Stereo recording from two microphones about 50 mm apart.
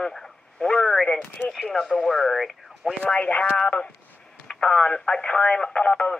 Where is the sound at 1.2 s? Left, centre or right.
Left.